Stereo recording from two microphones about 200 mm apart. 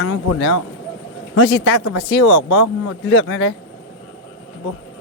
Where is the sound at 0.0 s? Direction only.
75° left (ahead or behind).